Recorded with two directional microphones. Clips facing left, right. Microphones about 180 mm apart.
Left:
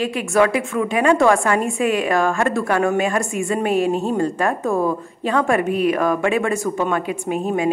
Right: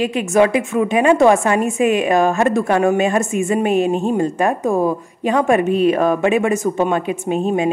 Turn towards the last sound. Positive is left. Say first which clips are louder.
# right 3 dB
turn(degrees=-25)  # may be behind; listen again after turning